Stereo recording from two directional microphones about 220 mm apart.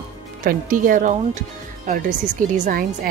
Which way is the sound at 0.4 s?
35° right (ahead or behind).